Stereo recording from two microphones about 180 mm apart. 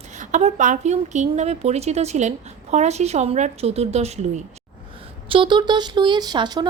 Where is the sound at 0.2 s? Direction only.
40° right (ahead or behind).